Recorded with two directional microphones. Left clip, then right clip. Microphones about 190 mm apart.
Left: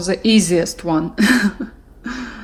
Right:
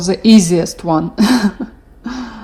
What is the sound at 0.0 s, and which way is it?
Speech, 30° right (ahead or behind).